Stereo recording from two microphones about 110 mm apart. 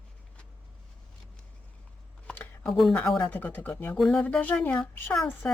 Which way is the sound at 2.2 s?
15° left (ahead or behind).